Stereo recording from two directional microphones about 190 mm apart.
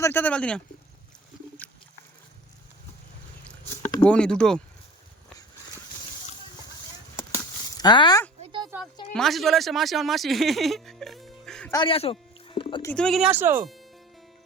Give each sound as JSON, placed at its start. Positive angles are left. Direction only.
{"t": 0.0, "sound": "speech", "side_deg": 10}
{"t": 1.6, "sound": "a sound", "side_deg": 10}
{"t": 3.8, "sound": "speech", "side_deg": 10}
{"t": 7.2, "sound": "a sound", "side_deg": 20}
{"t": 8.7, "sound": "speech", "side_deg": -10}
{"t": 9.1, "sound": "speech", "side_deg": 0}
{"t": 11.7, "sound": "speech", "side_deg": 25}
{"t": 12.8, "sound": "speech", "side_deg": 5}
{"t": 13.3, "sound": "speech", "side_deg": -10}